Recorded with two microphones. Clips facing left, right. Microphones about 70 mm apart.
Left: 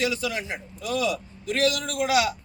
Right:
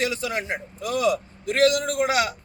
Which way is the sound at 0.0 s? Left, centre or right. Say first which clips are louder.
Right 1 dB; right.